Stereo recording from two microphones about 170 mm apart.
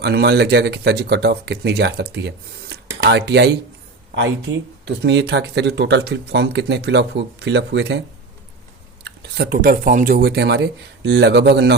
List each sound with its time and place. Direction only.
0.0 s speech: 70° right (ahead or behind)
4.1 s speech: 90° right
9.0 s speech: 80° right